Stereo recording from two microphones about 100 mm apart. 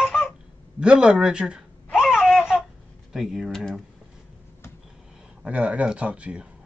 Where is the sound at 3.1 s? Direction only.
5° right (ahead or behind).